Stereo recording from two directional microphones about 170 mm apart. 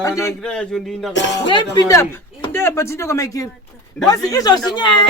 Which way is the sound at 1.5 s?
25° left (ahead or behind).